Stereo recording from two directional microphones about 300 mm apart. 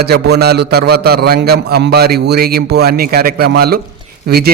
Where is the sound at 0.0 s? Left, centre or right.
Right.